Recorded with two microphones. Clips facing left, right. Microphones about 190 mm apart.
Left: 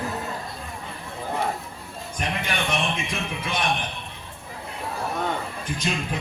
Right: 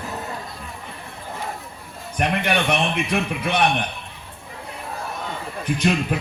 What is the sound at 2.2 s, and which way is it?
A man's voice, 65° right (ahead or behind).